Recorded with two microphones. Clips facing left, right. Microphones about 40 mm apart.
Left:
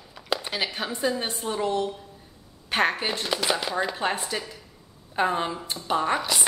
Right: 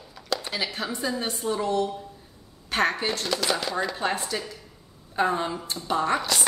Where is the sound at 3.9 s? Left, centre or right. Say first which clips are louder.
Even; left.